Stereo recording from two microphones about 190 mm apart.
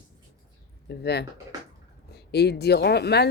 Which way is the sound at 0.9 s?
60° left (ahead or behind).